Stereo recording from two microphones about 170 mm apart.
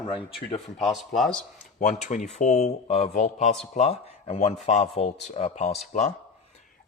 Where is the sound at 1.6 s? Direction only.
45° left (ahead or behind).